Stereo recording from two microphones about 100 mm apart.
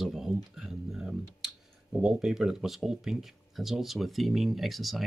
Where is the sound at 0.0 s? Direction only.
5° right (ahead or behind).